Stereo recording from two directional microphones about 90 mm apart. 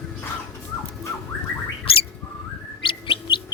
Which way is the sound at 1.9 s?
90° left.